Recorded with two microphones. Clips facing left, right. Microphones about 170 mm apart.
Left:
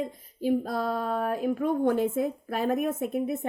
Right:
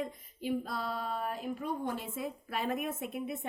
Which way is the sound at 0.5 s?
45° left (ahead or behind).